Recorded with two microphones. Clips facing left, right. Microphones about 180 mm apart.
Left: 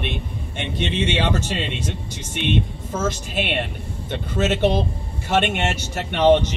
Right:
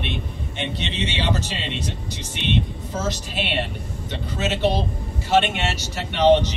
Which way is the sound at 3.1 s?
50° left (ahead or behind).